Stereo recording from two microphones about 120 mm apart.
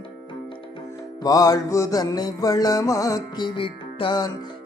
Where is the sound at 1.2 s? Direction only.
30° left (ahead or behind).